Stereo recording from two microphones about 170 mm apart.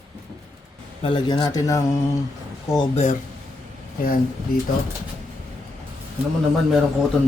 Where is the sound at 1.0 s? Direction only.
30° left (ahead or behind).